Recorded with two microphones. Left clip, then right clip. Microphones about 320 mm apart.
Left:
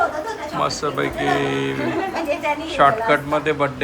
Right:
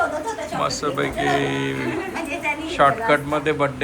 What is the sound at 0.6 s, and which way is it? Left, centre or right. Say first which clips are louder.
A man's voice: left 1 dB; centre.